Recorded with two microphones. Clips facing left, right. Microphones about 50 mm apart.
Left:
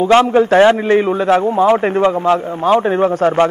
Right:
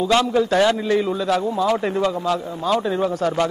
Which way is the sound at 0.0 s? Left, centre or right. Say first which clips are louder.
Left 7 dB; left.